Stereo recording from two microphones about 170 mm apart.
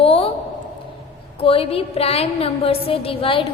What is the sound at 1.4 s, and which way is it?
A woman's voice, 35° left (ahead or behind).